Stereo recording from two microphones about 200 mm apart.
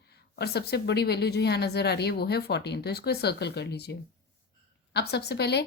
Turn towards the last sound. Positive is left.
turn(degrees=55)  # may be behind; listen again after turning